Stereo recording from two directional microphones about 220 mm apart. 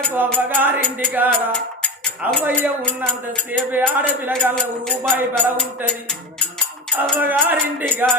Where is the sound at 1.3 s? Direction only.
5° left (ahead or behind).